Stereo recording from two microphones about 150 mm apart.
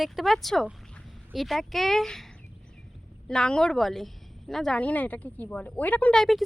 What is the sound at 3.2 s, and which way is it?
A woman's voice, 5° left (ahead or behind).